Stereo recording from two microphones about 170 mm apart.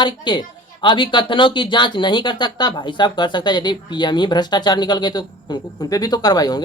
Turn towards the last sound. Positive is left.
turn(degrees=25)  # may be behind; listen again after turning